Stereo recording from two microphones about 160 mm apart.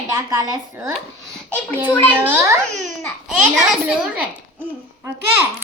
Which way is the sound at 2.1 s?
10° right (ahead or behind).